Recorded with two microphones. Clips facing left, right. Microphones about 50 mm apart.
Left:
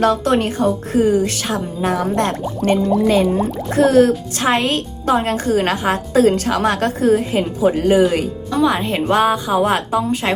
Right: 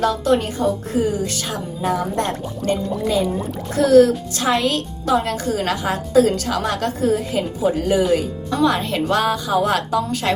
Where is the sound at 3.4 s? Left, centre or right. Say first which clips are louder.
Left 5 dB; left.